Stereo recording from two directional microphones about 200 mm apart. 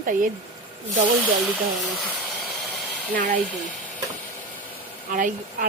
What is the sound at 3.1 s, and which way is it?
Speech, 45° right (ahead or behind).